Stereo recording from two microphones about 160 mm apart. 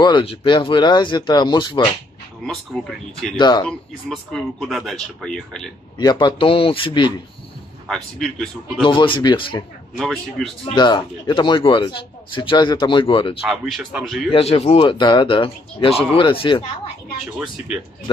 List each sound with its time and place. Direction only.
0.0 s speech: 30° left (ahead or behind)
2.4 s speech: centre (ahead or behind)
3.3 s speech: 25° left (ahead or behind)
3.6 s speech: 5° left (ahead or behind)
5.9 s speech: 25° left (ahead or behind)
7.9 s speech: 5° left (ahead or behind)
8.8 s a man's voice: 30° left (ahead or behind)
9.9 s speech: centre (ahead or behind)
10.6 s a man's voice: 30° left (ahead or behind)
13.5 s speech: centre (ahead or behind)
14.3 s a man's voice: 40° left (ahead or behind)